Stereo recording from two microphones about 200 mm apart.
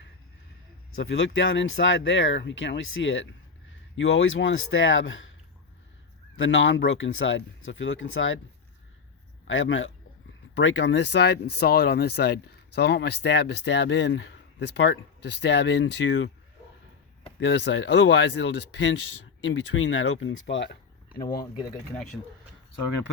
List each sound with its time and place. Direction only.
0.9 s speech: 70° left (ahead or behind)
6.3 s speech: 75° left (ahead or behind)
9.5 s speech: 75° left (ahead or behind)
17.4 s speech: 60° left (ahead or behind)